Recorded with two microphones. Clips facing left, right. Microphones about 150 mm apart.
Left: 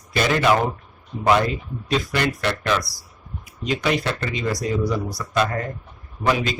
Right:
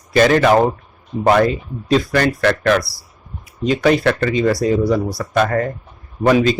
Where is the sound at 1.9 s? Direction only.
40° right (ahead or behind).